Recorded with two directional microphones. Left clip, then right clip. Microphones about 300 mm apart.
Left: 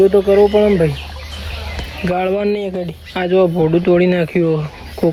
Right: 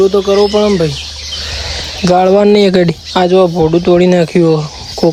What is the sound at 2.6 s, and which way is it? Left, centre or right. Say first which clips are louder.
Speech: right 13 dB; right.